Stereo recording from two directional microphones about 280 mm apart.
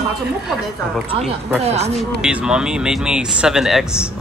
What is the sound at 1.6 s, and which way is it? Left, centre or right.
Speech, right.